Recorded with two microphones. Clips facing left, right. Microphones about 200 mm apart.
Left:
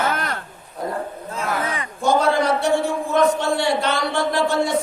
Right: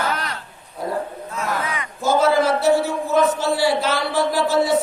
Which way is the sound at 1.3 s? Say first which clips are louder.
Left 1 dB; 30° left (ahead or behind).